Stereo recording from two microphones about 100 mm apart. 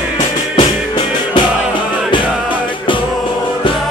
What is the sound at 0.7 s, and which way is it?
Music, 50° left (ahead or behind).